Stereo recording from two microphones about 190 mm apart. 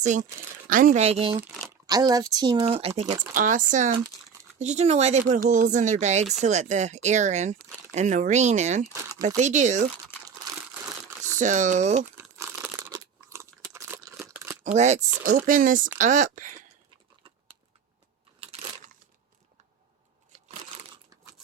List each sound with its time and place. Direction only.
0.0 s speech: 40° right (ahead or behind)
1.9 s speech: 20° right (ahead or behind); by 9.8 s 40° right (ahead or behind)
11.3 s speech: 40° right (ahead or behind)
12.1 s crumpling: 15° right (ahead or behind)
13.7 s a sound: 15° right (ahead or behind)
14.3 s crumpling: 15° right (ahead or behind)
14.6 s speech: 35° right (ahead or behind)